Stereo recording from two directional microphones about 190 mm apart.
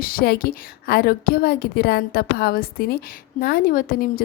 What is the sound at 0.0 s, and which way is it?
A woman's voice, 50° left (ahead or behind).